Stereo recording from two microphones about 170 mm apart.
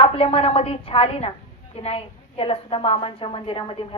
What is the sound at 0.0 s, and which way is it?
A woman's voice, 35° left (ahead or behind).